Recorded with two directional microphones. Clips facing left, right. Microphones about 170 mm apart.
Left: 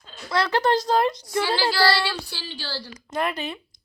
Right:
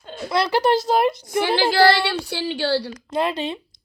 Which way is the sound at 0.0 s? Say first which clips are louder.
Right 11 dB; 55° right (ahead or behind).